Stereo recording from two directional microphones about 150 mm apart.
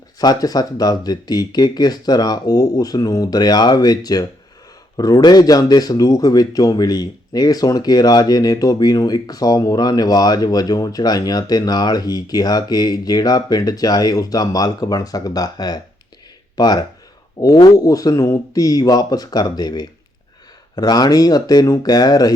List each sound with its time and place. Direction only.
0.2 s speech: 25° left (ahead or behind)